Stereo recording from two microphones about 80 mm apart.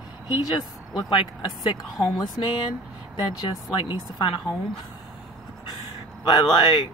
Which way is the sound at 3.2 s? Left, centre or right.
Left.